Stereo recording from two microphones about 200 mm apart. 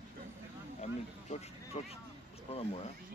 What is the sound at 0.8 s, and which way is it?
Speech, 35° left (ahead or behind).